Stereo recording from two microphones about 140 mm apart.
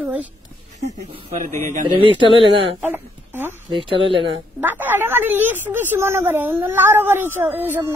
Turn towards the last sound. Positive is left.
turn(degrees=-15)  # may be behind; listen again after turning